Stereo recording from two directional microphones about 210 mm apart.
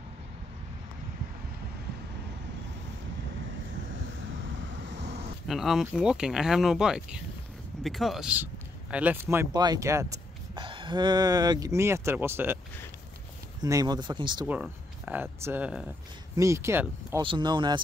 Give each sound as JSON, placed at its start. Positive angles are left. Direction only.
{"t": 4.8, "sound": "vehicle", "side_deg": -55}
{"t": 5.5, "sound": "speech", "side_deg": 0}
{"t": 13.6, "sound": "speech", "side_deg": -15}
{"t": 14.4, "sound": "speech", "side_deg": -5}